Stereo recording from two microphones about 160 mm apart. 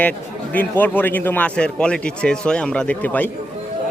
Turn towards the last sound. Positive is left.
turn(degrees=10)  # may be behind; listen again after turning